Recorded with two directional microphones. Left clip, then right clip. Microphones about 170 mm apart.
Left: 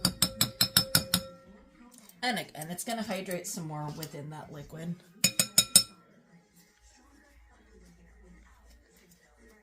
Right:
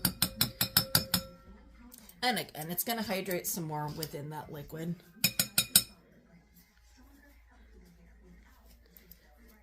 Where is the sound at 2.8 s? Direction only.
50° right (ahead or behind).